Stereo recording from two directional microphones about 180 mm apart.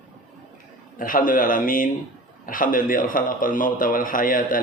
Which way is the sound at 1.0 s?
50° left (ahead or behind).